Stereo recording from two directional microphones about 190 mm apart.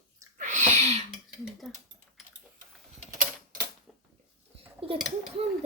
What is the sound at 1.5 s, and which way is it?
Speech, centre (ahead or behind).